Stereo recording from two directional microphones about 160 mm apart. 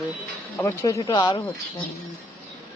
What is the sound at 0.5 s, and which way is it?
Speech, 20° left (ahead or behind).